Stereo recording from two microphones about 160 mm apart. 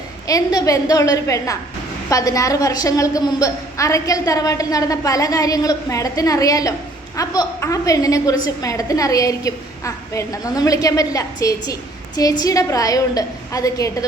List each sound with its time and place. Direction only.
0.3 s a woman's voice: 20° left (ahead or behind)